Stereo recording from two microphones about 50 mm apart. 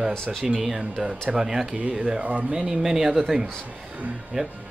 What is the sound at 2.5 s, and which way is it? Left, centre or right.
Speech, centre.